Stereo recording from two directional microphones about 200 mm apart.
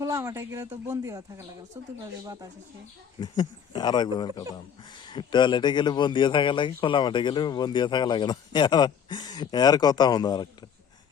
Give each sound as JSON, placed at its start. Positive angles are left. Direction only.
{"t": 0.0, "sound": "speech", "side_deg": -15}
{"t": 3.2, "sound": "a man's voice", "side_deg": 20}